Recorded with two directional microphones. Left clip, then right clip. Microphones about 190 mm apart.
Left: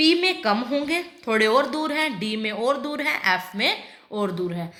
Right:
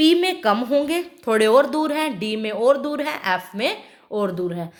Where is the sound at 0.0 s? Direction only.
55° right (ahead or behind).